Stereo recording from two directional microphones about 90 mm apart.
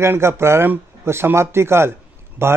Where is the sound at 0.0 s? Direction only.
30° right (ahead or behind).